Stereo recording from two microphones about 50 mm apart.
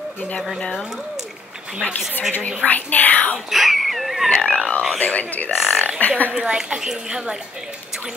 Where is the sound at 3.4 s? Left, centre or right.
Centre.